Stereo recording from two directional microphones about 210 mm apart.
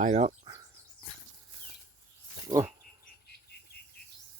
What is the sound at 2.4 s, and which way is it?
Speech, 15° right (ahead or behind).